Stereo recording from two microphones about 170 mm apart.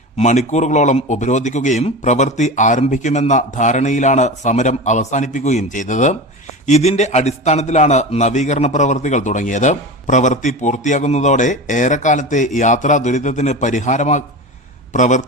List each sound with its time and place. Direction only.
0.2 s speech: 40° left (ahead or behind)